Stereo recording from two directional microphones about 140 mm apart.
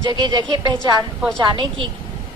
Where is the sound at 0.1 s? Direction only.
35° right (ahead or behind).